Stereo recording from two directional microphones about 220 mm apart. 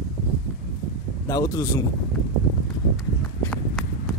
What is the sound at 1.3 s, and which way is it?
Speech, 15° left (ahead or behind).